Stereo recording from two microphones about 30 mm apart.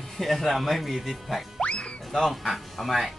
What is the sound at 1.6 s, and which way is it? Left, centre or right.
Music, left.